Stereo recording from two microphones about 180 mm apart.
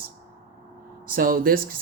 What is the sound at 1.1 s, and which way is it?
Speech, 50° right (ahead or behind).